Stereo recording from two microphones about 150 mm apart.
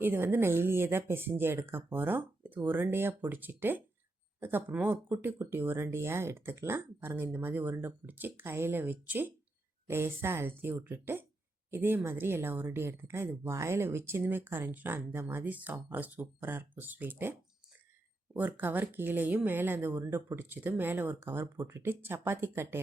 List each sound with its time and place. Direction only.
0.0 s speech: 15° right (ahead or behind)
18.3 s speech: 10° right (ahead or behind)